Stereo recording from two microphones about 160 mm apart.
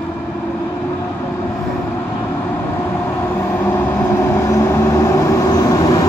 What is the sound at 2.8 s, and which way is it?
Vehicle, 15° left (ahead or behind).